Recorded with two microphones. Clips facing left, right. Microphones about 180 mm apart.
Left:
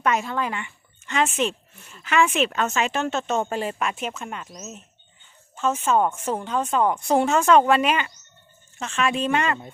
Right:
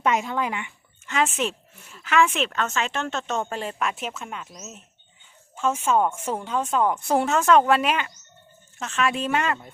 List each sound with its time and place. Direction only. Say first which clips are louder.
0.0 s speech: even; 15° right (ahead or behind)
1.0 s a woman's voice: left 1 dB; centre (ahead or behind)